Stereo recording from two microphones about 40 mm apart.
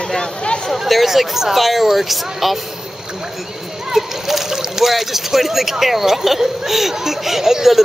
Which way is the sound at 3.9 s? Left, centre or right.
Centre.